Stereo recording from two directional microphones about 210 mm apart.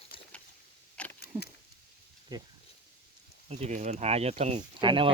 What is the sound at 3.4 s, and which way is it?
Speech, 30° right (ahead or behind).